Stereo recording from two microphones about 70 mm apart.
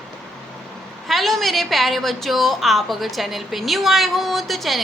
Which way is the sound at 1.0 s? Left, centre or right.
Centre.